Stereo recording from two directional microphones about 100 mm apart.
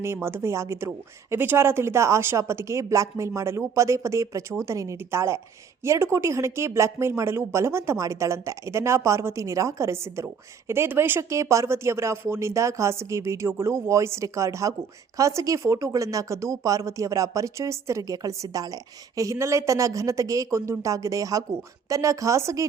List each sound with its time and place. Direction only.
0.0 s speech: 25° right (ahead or behind)